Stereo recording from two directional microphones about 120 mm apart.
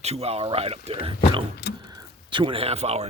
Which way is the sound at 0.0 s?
60° right (ahead or behind).